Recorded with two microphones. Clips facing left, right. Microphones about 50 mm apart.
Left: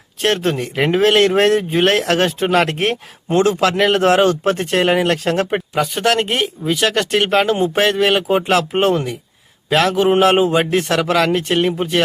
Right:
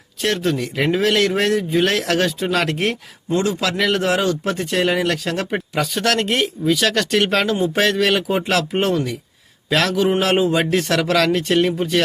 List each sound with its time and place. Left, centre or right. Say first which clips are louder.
0.2 s speech: left 3 dB; left
5.7 s a man's voice: left 3 dB; centre
7.4 s a man's voice: left 2 dB; left
9.6 s a man's voice: left 3 dB; left